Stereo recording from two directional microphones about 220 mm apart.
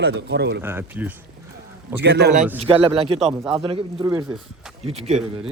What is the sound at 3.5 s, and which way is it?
Speech, 25° right (ahead or behind).